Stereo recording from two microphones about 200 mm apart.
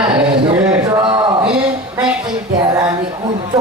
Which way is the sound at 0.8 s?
20° right (ahead or behind).